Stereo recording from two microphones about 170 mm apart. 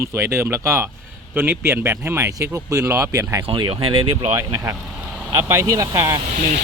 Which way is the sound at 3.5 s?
30° right (ahead or behind).